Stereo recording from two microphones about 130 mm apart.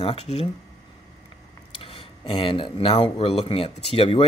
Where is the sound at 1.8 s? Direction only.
45° left (ahead or behind).